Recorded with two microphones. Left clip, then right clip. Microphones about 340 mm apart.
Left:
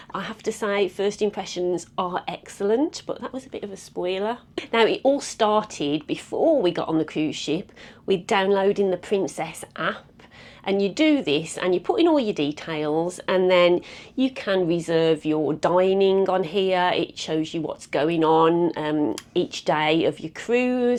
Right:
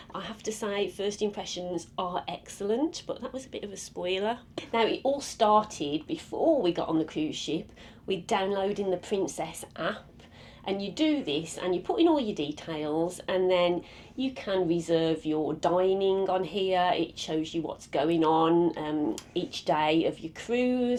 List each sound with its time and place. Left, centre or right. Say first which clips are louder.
0.1 s speech: left 7 dB; left
10.7 s speech: left 8 dB; left